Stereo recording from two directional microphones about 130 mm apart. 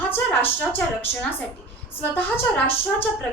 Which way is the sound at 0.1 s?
15° left (ahead or behind).